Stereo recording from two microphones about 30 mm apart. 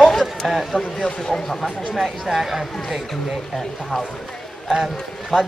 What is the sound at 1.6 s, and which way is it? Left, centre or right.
Speech, centre.